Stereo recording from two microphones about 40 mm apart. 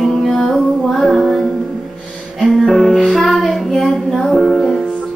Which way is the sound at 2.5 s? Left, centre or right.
Centre.